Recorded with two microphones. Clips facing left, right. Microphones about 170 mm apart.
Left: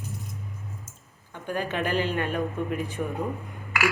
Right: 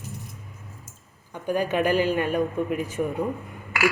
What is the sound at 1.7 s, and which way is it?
Speech, 15° right (ahead or behind).